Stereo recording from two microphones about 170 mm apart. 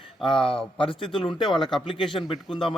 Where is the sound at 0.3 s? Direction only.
30° left (ahead or behind).